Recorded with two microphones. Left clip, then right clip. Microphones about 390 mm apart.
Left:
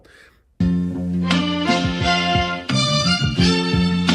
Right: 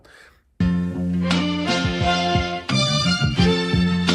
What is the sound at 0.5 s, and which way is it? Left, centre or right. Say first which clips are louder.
Music: left 2 dB; centre.